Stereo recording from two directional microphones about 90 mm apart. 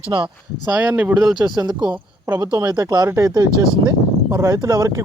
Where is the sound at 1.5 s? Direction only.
50° right (ahead or behind).